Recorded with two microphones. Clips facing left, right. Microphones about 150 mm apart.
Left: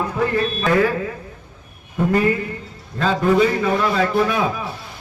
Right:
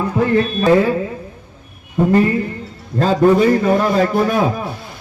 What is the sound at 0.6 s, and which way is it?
Speech, 25° right (ahead or behind).